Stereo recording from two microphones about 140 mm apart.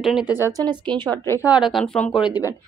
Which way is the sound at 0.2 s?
30° left (ahead or behind).